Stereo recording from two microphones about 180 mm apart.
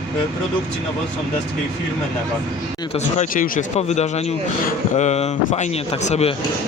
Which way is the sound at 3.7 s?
40° left (ahead or behind).